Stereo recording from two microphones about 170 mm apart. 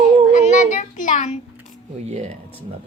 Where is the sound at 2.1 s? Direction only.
40° right (ahead or behind).